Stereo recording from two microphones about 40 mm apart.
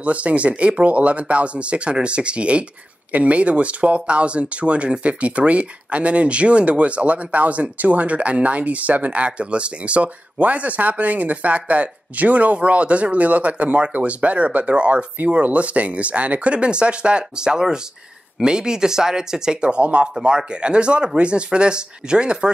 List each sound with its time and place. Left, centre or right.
0.0 s speech: right